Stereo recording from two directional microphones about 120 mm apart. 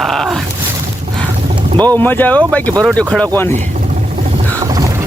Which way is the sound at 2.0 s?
15° left (ahead or behind).